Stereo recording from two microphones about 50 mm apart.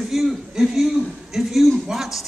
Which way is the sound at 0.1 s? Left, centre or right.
Centre.